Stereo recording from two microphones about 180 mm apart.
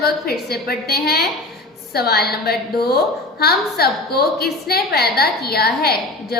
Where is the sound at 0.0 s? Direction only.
60° left (ahead or behind).